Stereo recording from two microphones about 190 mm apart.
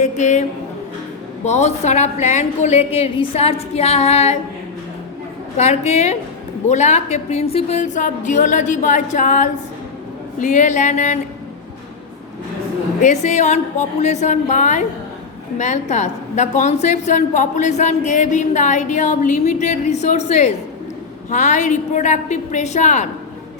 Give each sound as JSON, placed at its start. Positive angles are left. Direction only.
{"t": 0.0, "sound": "a sound", "side_deg": 40}
{"t": 1.5, "sound": "a woman's voice", "side_deg": 35}
{"t": 5.5, "sound": "a woman's voice", "side_deg": 35}
{"t": 13.0, "sound": "a woman's voice", "side_deg": 40}